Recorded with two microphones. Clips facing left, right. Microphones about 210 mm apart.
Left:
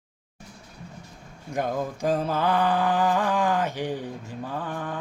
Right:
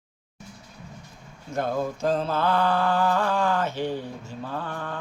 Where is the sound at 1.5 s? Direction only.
15° left (ahead or behind).